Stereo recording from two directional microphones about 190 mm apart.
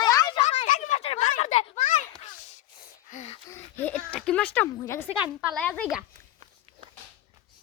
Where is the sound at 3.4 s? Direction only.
10° left (ahead or behind).